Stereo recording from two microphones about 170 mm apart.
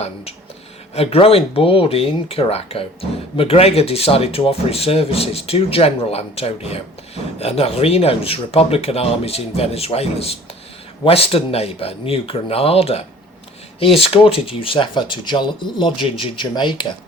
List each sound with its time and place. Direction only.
0.9 s speech: 35° left (ahead or behind)
14.0 s speech: 35° left (ahead or behind)